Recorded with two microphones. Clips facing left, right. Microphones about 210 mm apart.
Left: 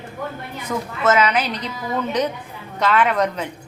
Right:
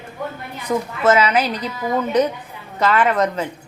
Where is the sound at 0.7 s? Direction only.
20° right (ahead or behind).